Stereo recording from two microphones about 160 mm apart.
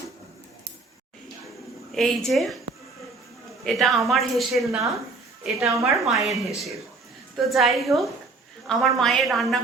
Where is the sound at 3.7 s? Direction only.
Centre (ahead or behind).